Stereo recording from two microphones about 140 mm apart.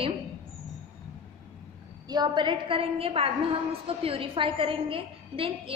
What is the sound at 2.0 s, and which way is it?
A woman's voice, 30° right (ahead or behind).